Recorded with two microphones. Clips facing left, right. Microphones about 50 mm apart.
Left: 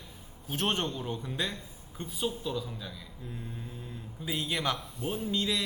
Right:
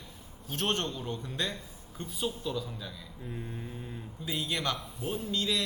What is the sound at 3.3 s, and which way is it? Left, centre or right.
Speech, centre.